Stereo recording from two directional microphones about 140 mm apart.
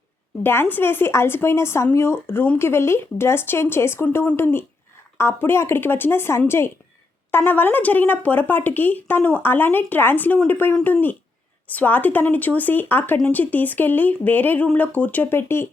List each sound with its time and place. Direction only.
0.4 s speech: 15° left (ahead or behind)